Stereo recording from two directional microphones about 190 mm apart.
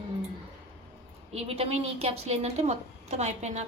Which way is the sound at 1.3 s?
30° right (ahead or behind).